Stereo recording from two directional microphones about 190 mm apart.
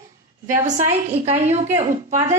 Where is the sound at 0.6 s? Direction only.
40° right (ahead or behind).